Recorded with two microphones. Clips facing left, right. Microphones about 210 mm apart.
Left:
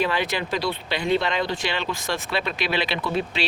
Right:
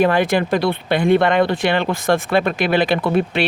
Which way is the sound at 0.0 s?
50° right (ahead or behind).